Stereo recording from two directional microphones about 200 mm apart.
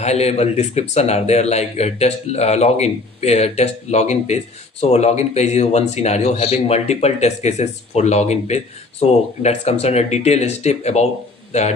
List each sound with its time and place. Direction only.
0.0 s speech: 35° left (ahead or behind)